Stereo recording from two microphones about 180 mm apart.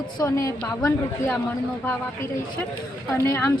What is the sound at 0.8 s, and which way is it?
Speech, 5° left (ahead or behind).